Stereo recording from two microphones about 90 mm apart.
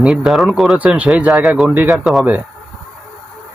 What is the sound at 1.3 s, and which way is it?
Speech, 5° right (ahead or behind).